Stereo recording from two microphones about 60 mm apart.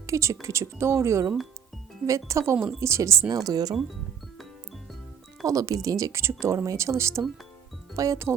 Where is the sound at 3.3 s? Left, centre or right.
Right.